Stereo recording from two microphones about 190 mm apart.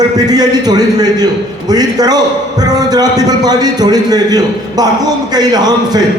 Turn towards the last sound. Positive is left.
turn(degrees=-20)  # may be behind; listen again after turning